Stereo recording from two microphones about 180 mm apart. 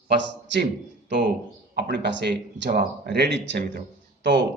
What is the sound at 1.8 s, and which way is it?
A man's voice, 75° right (ahead or behind).